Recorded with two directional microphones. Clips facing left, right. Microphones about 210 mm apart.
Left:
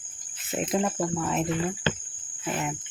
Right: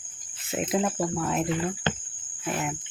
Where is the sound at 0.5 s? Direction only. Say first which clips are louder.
Even; 5° right (ahead or behind).